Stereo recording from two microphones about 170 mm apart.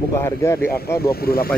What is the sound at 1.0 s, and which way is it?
Speech, 65° left (ahead or behind).